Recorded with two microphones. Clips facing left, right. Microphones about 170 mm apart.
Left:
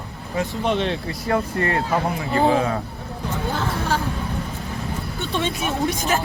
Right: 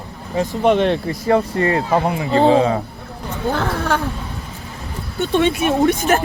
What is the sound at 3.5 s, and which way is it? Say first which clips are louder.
Speech: right 5 dB; 65° right (ahead or behind).